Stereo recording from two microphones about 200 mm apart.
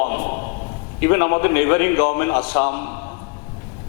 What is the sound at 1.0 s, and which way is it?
A man's voice, 20° left (ahead or behind).